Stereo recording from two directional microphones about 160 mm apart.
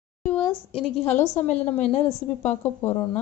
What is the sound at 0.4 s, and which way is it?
A woman's voice, 35° left (ahead or behind).